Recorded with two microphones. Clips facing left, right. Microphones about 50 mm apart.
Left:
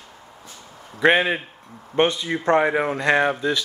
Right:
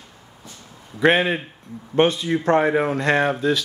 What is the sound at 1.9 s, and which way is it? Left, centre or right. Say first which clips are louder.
Speech: right 2 dB; centre.